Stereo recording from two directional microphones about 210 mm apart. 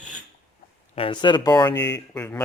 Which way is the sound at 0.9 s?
25° left (ahead or behind).